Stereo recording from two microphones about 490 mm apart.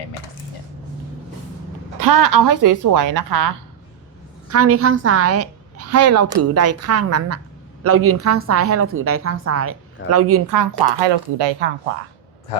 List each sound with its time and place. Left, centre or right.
2.0 s speech: right
4.5 s a woman's voice: right
11.0 s speech: right